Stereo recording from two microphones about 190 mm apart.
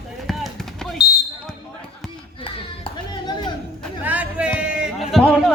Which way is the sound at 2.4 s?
25° left (ahead or behind).